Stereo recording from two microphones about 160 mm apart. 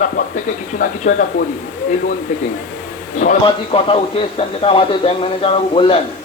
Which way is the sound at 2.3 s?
55° left (ahead or behind).